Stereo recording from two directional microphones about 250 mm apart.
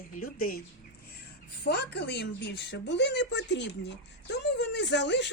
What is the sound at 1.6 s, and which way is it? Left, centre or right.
Speech, left.